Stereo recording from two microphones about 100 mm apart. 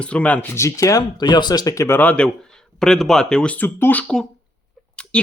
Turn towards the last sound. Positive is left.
turn(degrees=10)  # may be behind; listen again after turning